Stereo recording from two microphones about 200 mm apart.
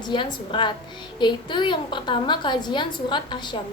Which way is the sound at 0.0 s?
20° left (ahead or behind).